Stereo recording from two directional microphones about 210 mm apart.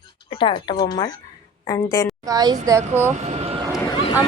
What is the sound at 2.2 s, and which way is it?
Speech, 15° right (ahead or behind).